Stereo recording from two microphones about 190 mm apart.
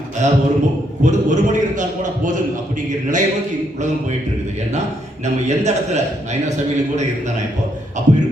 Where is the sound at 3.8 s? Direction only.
40° right (ahead or behind).